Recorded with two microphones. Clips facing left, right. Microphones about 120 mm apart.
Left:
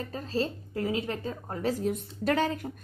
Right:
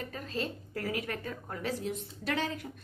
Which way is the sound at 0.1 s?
30° left (ahead or behind).